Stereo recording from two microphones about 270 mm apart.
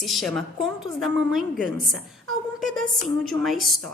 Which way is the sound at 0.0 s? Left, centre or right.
Centre.